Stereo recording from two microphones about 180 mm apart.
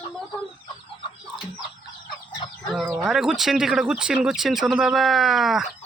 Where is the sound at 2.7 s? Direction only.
5° right (ahead or behind).